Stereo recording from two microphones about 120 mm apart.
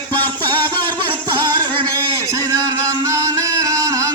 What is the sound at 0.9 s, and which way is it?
Music, 35° right (ahead or behind).